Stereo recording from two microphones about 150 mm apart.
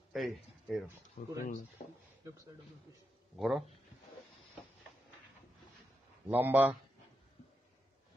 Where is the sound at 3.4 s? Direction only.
Centre (ahead or behind).